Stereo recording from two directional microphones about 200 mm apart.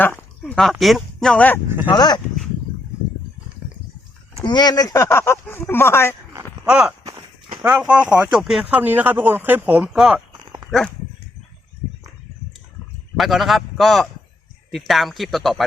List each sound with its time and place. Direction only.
0.0 s speech: 5° left (ahead or behind)
1.9 s speech: 20° left (ahead or behind)
4.4 s speech: 20° left (ahead or behind)
6.3 s a sound: 5° right (ahead or behind)
7.0 s walk: 15° right (ahead or behind)
7.6 s a man's voice: 5° right (ahead or behind)
13.1 s a man's voice: centre (ahead or behind)